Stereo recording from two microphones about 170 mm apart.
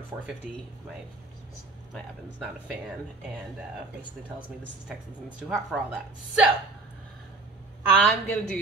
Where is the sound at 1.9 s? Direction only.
Centre (ahead or behind).